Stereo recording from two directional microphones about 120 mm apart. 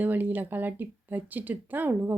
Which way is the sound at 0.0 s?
15° right (ahead or behind).